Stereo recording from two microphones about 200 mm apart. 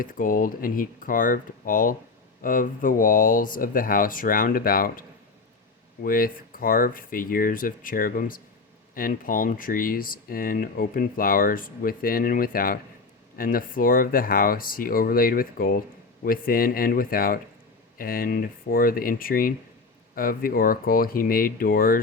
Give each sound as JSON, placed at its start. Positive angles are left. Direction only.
{"t": 0.0, "sound": "speech", "side_deg": 45}